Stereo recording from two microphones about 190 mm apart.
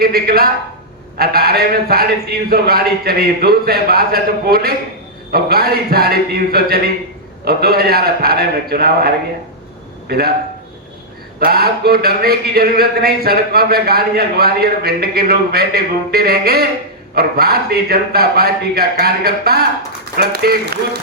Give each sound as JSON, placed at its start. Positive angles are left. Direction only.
{"t": 0.0, "sound": "a man's voice", "side_deg": -55}
{"t": 11.3, "sound": "a man's voice", "side_deg": -55}